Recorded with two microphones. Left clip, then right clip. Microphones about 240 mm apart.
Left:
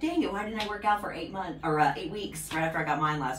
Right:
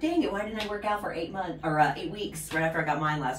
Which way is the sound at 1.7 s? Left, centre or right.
Centre.